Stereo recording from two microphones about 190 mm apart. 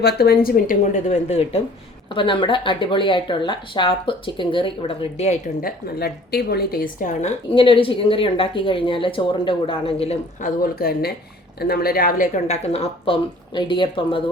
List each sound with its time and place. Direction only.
0.0 s a woman's voice: 55° left (ahead or behind); by 5.4 s 35° left (ahead or behind)
5.6 s a woman's voice: 55° left (ahead or behind); by 10.5 s 30° left (ahead or behind)
10.6 s a woman's voice: 50° left (ahead or behind); by 14.2 s 25° left (ahead or behind)